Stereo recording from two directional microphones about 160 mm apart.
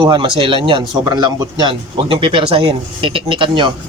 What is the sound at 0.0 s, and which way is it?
A man's voice, 30° right (ahead or behind).